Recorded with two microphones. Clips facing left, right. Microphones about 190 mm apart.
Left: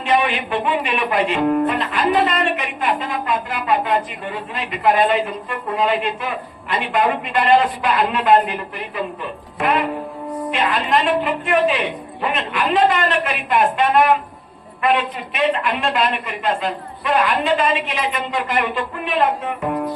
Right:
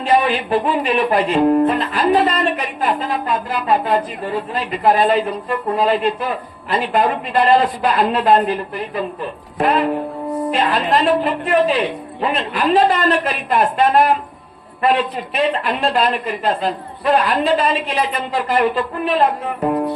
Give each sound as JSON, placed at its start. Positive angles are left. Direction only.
{"t": 0.0, "sound": "speech", "side_deg": -35}
{"t": 9.6, "sound": "speech", "side_deg": -35}